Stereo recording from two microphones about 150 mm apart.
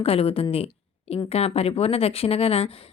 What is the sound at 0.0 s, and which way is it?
Speech, 40° left (ahead or behind).